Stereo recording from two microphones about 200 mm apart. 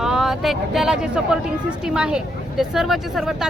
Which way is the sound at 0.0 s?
Centre (ahead or behind).